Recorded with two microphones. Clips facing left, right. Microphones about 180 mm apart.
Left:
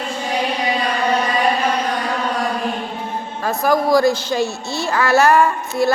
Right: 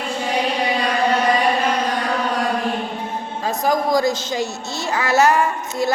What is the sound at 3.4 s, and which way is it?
A woman's voice, 15° right (ahead or behind).